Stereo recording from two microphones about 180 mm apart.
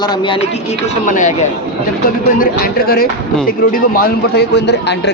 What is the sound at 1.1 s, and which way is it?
Speech, 45° left (ahead or behind).